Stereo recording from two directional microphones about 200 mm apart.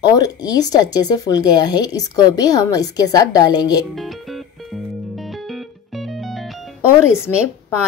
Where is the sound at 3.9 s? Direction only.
Centre (ahead or behind).